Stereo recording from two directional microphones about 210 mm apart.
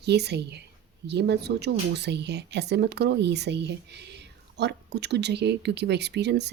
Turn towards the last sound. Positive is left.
turn(degrees=-55)  # may be behind; listen again after turning